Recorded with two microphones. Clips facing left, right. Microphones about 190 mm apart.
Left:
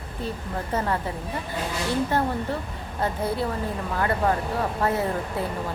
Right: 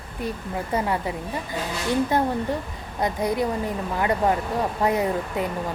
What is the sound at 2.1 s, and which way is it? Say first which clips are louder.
Speech: right 2 dB; 15° right (ahead or behind).